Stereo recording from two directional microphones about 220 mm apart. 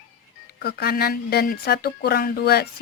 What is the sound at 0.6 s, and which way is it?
Speech, 45° left (ahead or behind).